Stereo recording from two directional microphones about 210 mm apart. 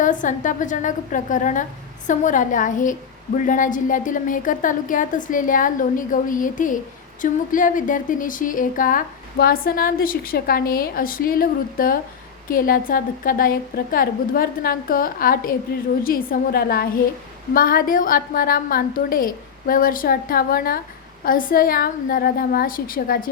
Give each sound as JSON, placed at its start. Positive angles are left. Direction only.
{"t": 0.0, "sound": "a woman's voice", "side_deg": 40}